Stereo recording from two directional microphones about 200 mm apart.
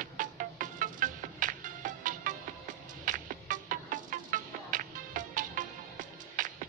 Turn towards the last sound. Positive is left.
turn(degrees=-40)  # may be behind; listen again after turning